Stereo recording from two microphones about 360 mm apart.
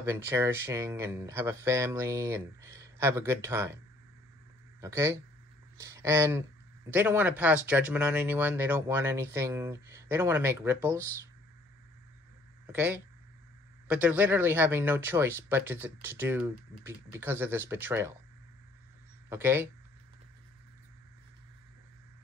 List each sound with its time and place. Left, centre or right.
0.0 s speech: centre
12.7 s speech: centre
19.2 s speech: centre